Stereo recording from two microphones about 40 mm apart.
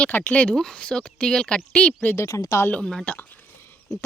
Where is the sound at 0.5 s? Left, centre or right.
Centre.